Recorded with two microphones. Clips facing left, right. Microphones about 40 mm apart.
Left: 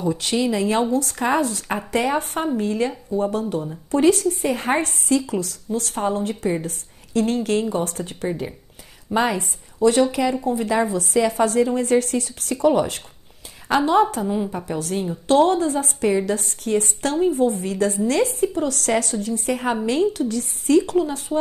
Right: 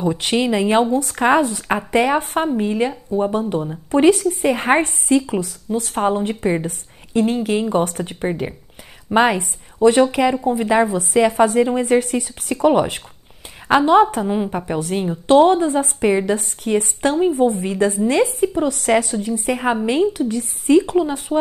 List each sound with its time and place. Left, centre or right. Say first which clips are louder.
0.1 s a woman's voice: right 3 dB; right
2.1 s a woman's voice: right 4 dB; right
5.1 s a woman's voice: right 4 dB; right
5.9 s speech: right 5 dB; right
7.2 s speech: right 2 dB; centre
7.7 s speech: right 5 dB; right
10.1 s a woman's voice: right 4 dB; right